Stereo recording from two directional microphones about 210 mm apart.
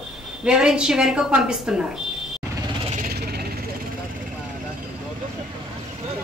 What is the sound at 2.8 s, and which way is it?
Vehicle, 35° right (ahead or behind).